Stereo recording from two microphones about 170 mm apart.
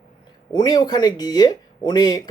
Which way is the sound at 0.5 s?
25° left (ahead or behind).